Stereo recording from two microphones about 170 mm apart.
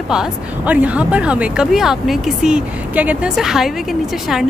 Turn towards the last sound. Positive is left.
turn(degrees=0)  # may be behind; listen again after turning